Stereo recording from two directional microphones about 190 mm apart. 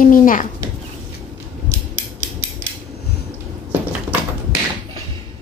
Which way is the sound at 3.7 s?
10° right (ahead or behind).